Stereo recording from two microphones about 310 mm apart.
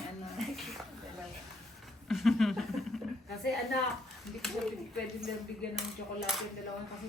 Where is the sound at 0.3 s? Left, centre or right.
Centre.